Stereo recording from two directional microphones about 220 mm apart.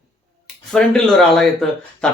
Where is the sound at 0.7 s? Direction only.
5° left (ahead or behind).